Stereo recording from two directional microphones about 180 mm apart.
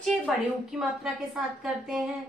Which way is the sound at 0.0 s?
5° left (ahead or behind).